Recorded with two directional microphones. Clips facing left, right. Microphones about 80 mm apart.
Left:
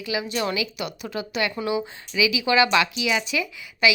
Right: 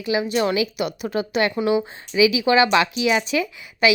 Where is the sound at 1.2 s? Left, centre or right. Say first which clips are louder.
Right 5 dB; right.